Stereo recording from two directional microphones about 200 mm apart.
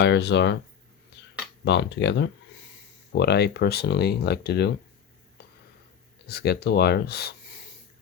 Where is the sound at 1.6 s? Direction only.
60° left (ahead or behind).